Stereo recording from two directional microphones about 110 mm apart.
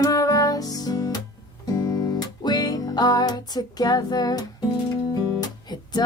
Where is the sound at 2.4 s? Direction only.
35° left (ahead or behind).